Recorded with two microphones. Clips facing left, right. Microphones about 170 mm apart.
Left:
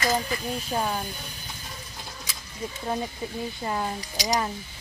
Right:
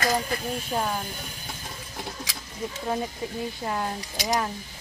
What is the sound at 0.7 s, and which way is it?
Speech, centre (ahead or behind).